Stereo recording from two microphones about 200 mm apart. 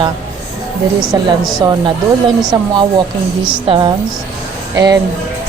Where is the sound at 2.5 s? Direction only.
20° right (ahead or behind).